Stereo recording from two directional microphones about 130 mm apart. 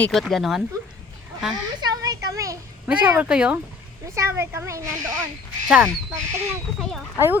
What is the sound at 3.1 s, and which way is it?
Speech, 10° right (ahead or behind).